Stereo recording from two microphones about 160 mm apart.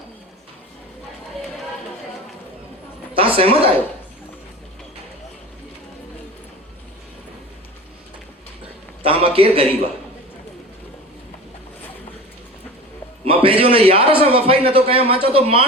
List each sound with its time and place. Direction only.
3.2 s a sound: 35° right (ahead or behind)
9.0 s a man's voice: 35° right (ahead or behind)
13.2 s a man's voice: 35° right (ahead or behind)